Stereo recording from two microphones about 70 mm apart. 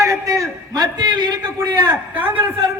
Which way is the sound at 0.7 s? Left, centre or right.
Right.